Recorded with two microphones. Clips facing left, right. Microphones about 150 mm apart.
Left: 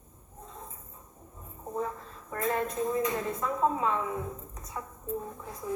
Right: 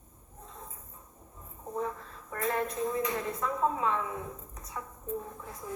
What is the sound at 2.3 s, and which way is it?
Speech, 25° left (ahead or behind).